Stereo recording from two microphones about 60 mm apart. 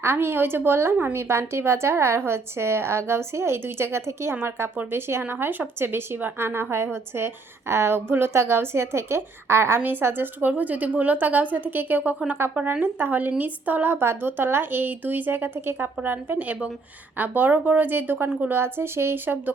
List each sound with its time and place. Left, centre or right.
0.0 s a woman's voice: right